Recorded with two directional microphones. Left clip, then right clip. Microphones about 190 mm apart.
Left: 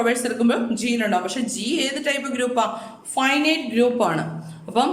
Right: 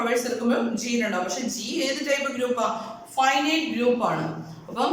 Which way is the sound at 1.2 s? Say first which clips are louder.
Left 4 dB; 55° left (ahead or behind).